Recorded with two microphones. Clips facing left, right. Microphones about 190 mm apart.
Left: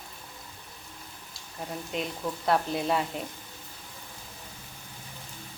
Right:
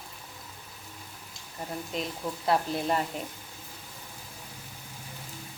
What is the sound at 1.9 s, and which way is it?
A woman's voice, centre (ahead or behind).